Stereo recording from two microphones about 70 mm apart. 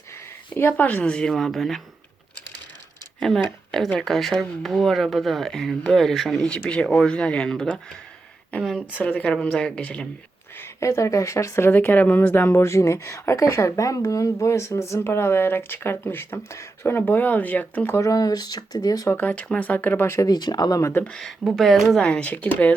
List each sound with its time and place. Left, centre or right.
0.5 s speech: left; by 1.8 s centre
3.2 s speech: centre
6.5 s speech: centre
9.0 s speech: left
9.3 s speech: centre
10.6 s speech: left
11.7 s speech: left
18.0 s speech: left
19.2 s speech: left
20.1 s speech: left
20.3 s speech: left
21.0 s speech: centre
21.4 s speech: centre
22.0 s speech: centre